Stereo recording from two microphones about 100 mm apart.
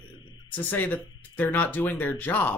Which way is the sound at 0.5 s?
20° left (ahead or behind).